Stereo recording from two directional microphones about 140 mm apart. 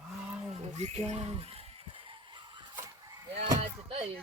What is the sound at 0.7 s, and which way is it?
Speech, 50° right (ahead or behind).